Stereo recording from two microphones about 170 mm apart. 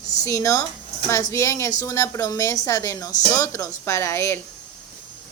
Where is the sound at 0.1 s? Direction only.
20° left (ahead or behind).